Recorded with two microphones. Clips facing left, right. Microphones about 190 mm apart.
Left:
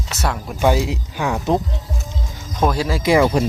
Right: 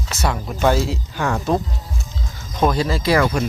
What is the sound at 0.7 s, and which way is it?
Speech, 15° left (ahead or behind).